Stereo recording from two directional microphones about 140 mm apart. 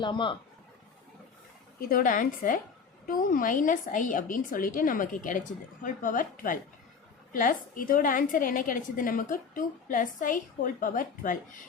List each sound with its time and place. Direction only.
0.0 s speech: 35° left (ahead or behind)
1.8 s a woman's voice: 90° left; by 11.6 s 70° left (ahead or behind)